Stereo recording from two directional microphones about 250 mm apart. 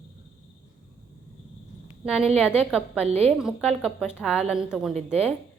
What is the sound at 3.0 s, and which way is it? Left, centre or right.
Speech, right.